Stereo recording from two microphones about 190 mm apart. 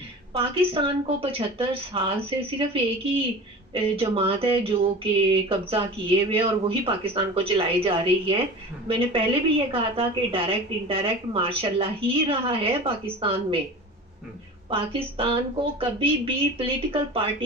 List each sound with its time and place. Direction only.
0.3 s a woman's voice: 30° right (ahead or behind)
14.7 s a woman's voice: 30° right (ahead or behind)